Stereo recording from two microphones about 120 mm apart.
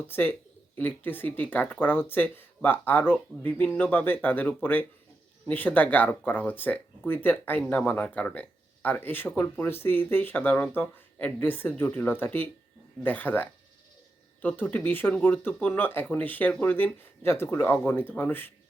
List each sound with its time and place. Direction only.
0.1 s speech: 15° left (ahead or behind)